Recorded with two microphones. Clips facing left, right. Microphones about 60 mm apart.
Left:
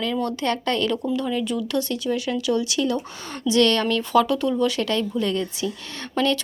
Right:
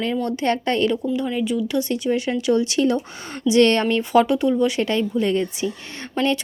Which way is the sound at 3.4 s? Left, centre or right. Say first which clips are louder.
Right 3 dB; right.